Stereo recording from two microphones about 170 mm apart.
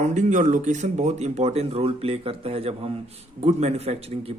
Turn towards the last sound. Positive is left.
turn(degrees=-35)  # may be behind; listen again after turning